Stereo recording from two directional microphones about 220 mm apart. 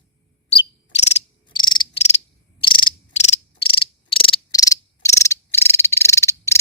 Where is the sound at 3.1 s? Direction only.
30° left (ahead or behind).